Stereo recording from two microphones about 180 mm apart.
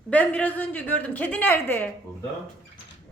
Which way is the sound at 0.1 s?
10° left (ahead or behind).